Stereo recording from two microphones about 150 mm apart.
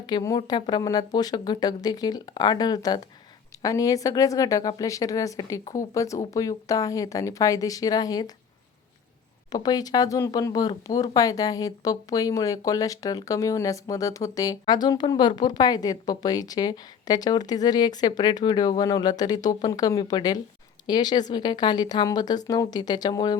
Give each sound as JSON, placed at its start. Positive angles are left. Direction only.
{"t": 0.0, "sound": "speech", "side_deg": 25}
{"t": 9.5, "sound": "speech", "side_deg": 25}